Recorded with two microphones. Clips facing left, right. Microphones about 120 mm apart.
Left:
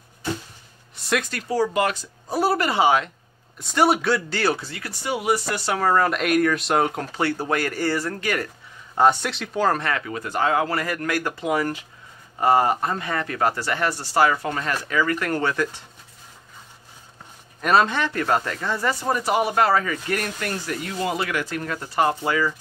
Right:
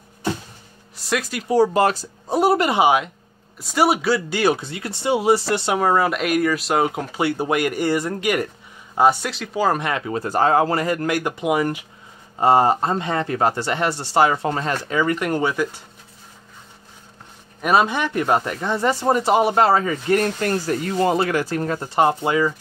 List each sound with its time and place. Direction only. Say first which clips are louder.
0.9 s speech: right 1 dB; centre (ahead or behind)
1.5 s speech: right 5 dB; 30° right (ahead or behind)
2.3 s speech: right 4 dB; 20° right (ahead or behind)
6.0 s speech: even; centre (ahead or behind)
12.4 s speech: right 3 dB; 25° right (ahead or behind); by 15.8 s 10° right (ahead or behind)
17.6 s speech: right 1 dB; 10° right (ahead or behind)